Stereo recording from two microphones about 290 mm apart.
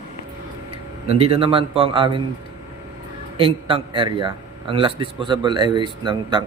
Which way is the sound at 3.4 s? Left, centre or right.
Centre.